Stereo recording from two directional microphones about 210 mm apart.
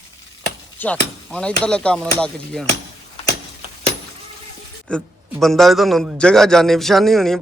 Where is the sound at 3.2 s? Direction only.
30° left (ahead or behind).